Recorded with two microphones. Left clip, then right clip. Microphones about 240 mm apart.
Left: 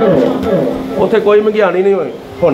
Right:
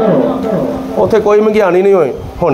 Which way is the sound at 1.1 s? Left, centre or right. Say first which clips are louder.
Right 1 dB; right.